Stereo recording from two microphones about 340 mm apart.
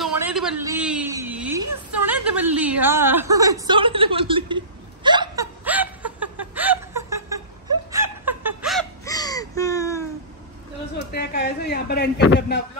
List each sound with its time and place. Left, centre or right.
0.0 s a sound: centre
1.9 s chuckle: centre
7.9 s laughter: centre
9.0 s a sound: centre
11.1 s a woman's voice: left
12.2 s a man's voice: left